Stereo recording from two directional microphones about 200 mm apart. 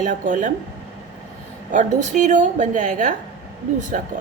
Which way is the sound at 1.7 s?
40° right (ahead or behind).